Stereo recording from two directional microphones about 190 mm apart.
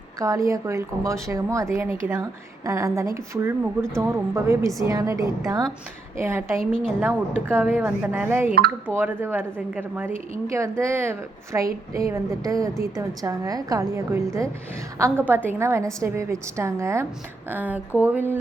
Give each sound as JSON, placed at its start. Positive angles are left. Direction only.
{"t": 0.2, "sound": "a woman's voice", "side_deg": -15}